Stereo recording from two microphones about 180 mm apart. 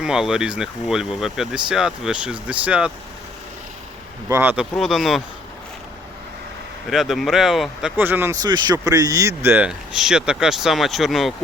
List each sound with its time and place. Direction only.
0.0 s speech: 5° right (ahead or behind)
4.3 s speech: 10° right (ahead or behind)
4.7 s speech: centre (ahead or behind)
6.8 s speech: centre (ahead or behind)